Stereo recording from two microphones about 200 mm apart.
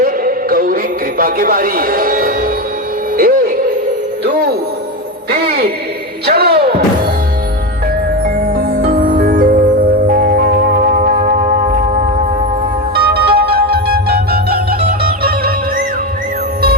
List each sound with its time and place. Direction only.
0.0 s music: 45° right (ahead or behind)
1.2 s a man's voice: 45° right (ahead or behind)
5.3 s music: 50° right (ahead or behind)
8.4 s music: 45° right (ahead or behind)
13.0 s music: 55° right (ahead or behind)